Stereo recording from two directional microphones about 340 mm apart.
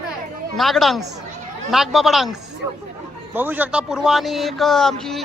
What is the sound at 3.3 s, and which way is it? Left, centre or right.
Speech, centre.